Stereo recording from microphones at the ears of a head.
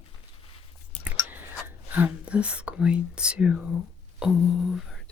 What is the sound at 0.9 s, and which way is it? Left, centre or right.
Whispering, left.